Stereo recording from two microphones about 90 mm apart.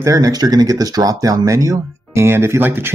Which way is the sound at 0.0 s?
40° right (ahead or behind).